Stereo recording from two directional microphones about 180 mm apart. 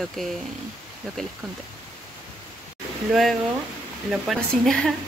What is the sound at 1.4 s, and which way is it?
Speech, centre (ahead or behind).